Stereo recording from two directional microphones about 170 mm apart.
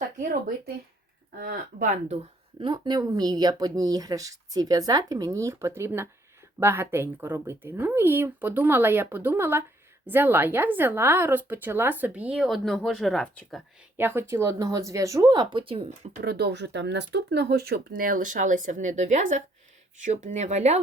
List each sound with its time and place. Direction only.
0.2 s speech: 60° right (ahead or behind)
2.6 s a woman's voice: 25° right (ahead or behind); by 13.6 s centre (ahead or behind)
13.9 s speech: 10° right (ahead or behind); by 16.1 s 35° right (ahead or behind)
16.2 s speech: 70° right (ahead or behind); by 20.8 s 40° right (ahead or behind)